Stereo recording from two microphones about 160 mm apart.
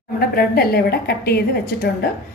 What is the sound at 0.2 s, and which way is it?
A woman's voice, 70° left (ahead or behind).